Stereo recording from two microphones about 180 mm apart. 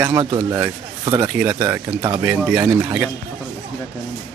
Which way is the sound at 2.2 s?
10° right (ahead or behind).